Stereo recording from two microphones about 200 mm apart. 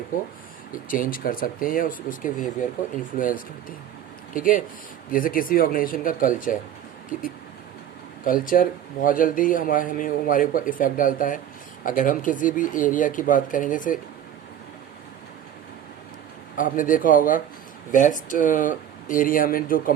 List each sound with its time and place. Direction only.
0.9 s a man's voice: 45° left (ahead or behind)
8.2 s a man's voice: 45° left (ahead or behind)
16.6 s a man's voice: 40° left (ahead or behind)